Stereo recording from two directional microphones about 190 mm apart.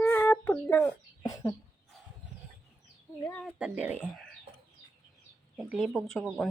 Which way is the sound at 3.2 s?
10° left (ahead or behind).